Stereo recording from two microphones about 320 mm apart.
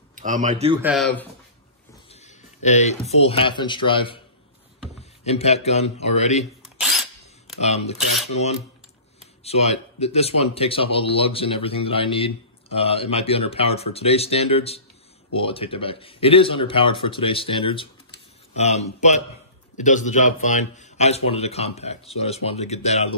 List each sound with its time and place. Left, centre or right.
0.1 s a man's voice: right
0.8 s speech: centre
2.2 s speech: left
5.2 s a man's voice: centre
6.8 s a sound: centre
7.6 s a man's voice: centre
9.4 s a man's voice: centre